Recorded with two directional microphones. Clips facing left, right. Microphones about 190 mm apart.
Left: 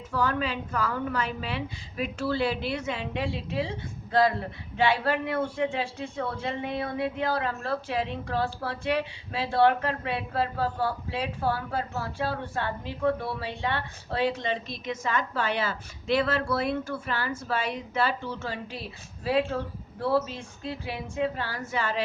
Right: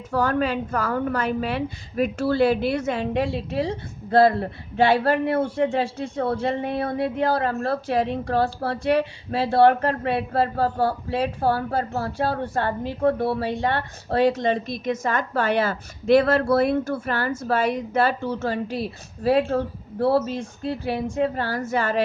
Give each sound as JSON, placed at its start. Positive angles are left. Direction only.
{"t": 0.1, "sound": "a woman's voice", "side_deg": -50}